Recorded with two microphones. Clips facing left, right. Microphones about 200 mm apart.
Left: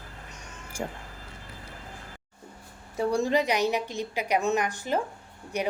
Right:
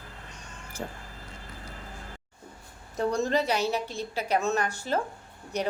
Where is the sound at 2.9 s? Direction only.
10° left (ahead or behind).